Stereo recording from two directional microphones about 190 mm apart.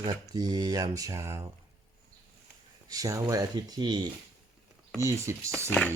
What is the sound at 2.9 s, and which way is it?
Speech, 20° right (ahead or behind).